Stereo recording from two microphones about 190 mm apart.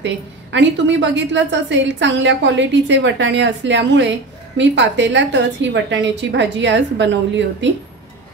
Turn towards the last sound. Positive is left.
turn(degrees=-70)  # may be behind; listen again after turning